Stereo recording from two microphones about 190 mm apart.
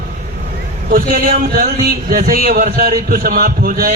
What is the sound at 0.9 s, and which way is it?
A man's voice, 50° right (ahead or behind).